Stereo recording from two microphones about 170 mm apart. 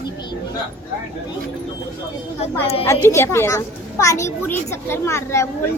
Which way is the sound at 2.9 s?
15° left (ahead or behind).